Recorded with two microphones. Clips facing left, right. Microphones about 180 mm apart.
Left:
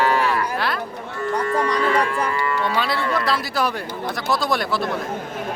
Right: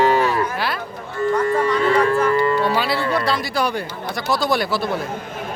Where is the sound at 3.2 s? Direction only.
Centre (ahead or behind).